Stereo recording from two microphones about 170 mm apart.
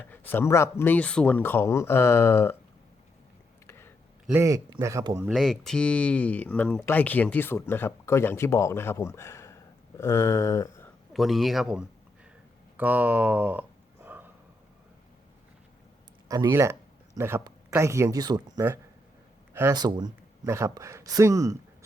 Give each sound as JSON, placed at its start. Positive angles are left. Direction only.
{"t": 0.0, "sound": "speech", "side_deg": 10}
{"t": 3.7, "sound": "a sound", "side_deg": 15}
{"t": 4.3, "sound": "a man's voice", "side_deg": -15}
{"t": 5.3, "sound": "speech", "side_deg": 0}
{"t": 11.1, "sound": "speech", "side_deg": 0}
{"t": 12.7, "sound": "a sound", "side_deg": -10}
{"t": 16.3, "sound": "a man's voice", "side_deg": -20}